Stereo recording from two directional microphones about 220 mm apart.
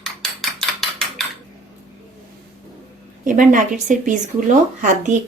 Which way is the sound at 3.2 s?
35° right (ahead or behind).